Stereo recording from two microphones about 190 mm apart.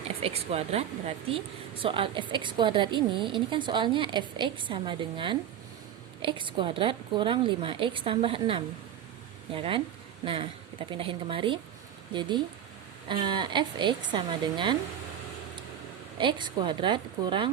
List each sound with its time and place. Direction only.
0.2 s a woman's voice: 30° right (ahead or behind)
13.1 s a woman's voice: 25° right (ahead or behind)
16.1 s a woman's voice: 25° right (ahead or behind)